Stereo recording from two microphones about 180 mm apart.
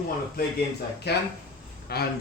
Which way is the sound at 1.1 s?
65° left (ahead or behind).